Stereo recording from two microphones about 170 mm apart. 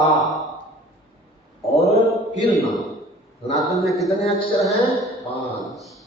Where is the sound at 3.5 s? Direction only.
Centre (ahead or behind).